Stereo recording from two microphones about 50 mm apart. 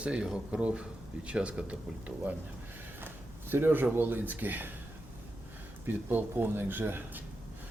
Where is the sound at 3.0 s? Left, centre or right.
Right.